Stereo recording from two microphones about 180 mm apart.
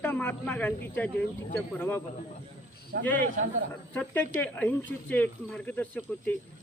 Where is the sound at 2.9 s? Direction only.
55° right (ahead or behind).